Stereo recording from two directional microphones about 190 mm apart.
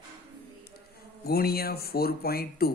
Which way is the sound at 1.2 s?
55° left (ahead or behind).